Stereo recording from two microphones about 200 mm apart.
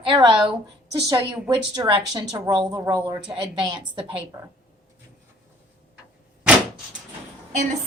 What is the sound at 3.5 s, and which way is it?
Speech, 25° right (ahead or behind).